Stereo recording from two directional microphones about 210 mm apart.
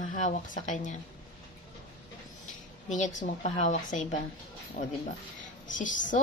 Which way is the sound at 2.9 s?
40° left (ahead or behind).